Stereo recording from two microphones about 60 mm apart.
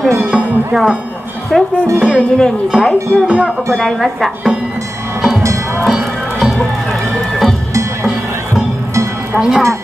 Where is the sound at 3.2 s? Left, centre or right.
Centre.